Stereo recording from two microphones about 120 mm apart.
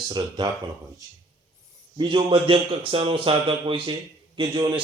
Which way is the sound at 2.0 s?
40° right (ahead or behind).